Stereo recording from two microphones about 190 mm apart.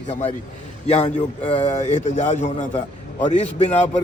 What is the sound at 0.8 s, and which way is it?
A man's voice, 35° left (ahead or behind).